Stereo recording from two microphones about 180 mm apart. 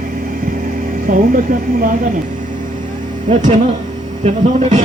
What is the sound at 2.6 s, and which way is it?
Vehicle, 45° right (ahead or behind).